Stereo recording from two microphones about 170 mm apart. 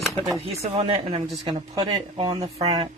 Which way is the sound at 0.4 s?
35° right (ahead or behind).